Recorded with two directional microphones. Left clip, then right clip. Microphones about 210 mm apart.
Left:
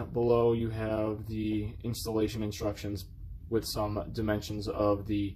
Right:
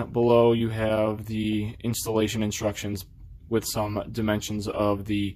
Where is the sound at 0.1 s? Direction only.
35° right (ahead or behind).